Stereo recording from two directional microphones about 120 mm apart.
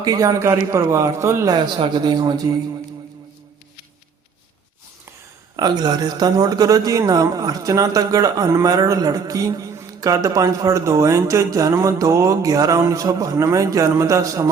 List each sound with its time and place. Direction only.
0.0 s a man's voice: 30° right (ahead or behind)
1.5 s speech: 40° right (ahead or behind)
5.5 s a man's voice: 35° right (ahead or behind)